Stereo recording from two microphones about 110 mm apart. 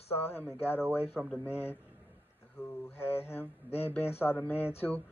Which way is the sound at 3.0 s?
65° left (ahead or behind).